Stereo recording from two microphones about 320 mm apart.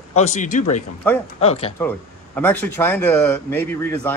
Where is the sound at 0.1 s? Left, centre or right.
Left.